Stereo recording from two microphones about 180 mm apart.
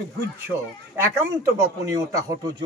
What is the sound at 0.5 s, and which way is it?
A man's voice, 15° right (ahead or behind).